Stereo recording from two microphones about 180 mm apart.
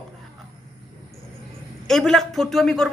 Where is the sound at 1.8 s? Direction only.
Centre (ahead or behind).